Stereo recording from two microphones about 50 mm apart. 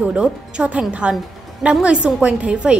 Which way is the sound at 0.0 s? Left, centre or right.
Centre.